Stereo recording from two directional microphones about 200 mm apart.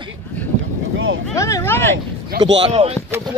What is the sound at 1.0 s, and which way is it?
Vehicle, 75° right (ahead or behind).